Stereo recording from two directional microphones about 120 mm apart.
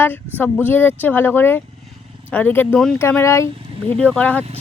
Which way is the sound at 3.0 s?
20° left (ahead or behind).